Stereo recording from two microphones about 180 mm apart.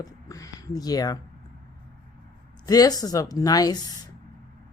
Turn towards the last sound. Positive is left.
turn(degrees=20)  # may be behind; listen again after turning